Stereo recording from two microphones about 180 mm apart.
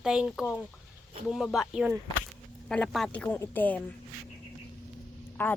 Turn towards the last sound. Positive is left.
turn(degrees=10)  # may be behind; listen again after turning